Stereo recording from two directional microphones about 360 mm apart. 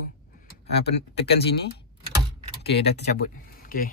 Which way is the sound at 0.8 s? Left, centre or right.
Left.